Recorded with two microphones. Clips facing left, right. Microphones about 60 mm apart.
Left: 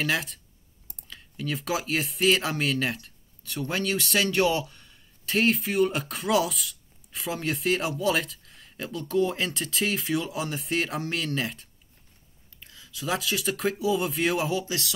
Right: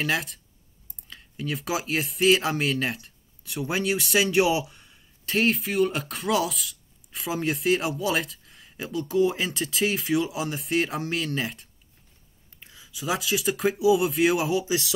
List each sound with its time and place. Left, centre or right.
0.0 s speech: centre
12.5 s speech: centre